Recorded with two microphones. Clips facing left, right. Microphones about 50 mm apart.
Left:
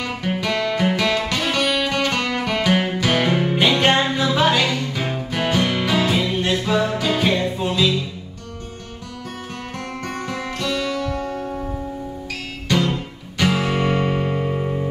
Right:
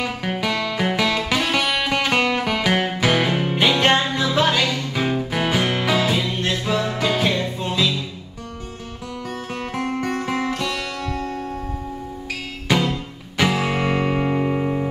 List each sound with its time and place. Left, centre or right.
0.3 s music: centre
9.8 s music: centre
11.1 s music: centre
12.6 s music: centre
13.7 s music: right